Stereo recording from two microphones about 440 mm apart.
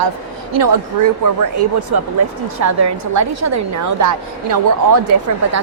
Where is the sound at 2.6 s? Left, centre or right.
Right.